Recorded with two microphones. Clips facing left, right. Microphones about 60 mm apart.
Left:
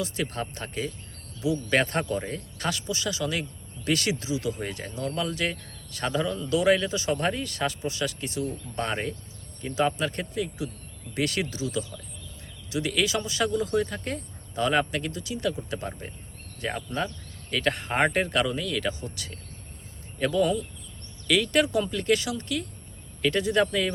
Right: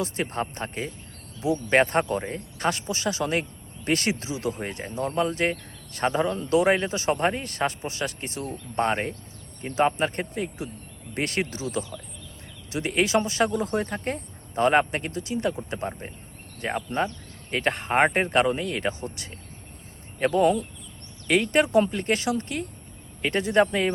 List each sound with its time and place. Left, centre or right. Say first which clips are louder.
0.0 s speech: right 2 dB; right
18.9 s speech: right 2 dB; right